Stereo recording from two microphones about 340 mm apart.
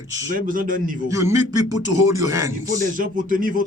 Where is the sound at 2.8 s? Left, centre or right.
Right.